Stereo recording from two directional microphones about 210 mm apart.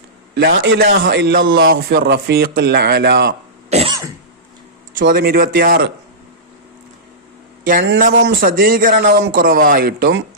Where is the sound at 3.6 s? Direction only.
30° right (ahead or behind).